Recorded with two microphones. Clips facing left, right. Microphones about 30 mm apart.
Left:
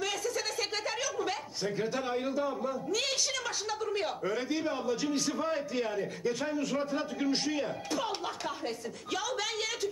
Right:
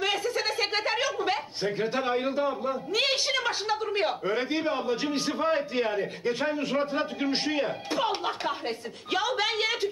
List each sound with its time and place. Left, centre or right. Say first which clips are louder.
0.0 s a woman's voice: right 6 dB; right